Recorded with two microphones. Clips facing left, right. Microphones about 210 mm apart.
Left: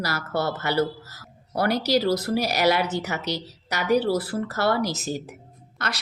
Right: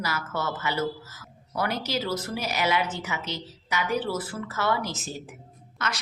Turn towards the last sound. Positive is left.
turn(degrees=35)  # may be behind; listen again after turning